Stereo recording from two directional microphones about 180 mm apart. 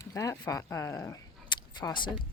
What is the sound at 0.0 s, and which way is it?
Speech, 15° left (ahead or behind).